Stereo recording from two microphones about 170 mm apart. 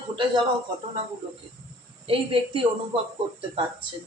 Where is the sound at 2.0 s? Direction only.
30° right (ahead or behind).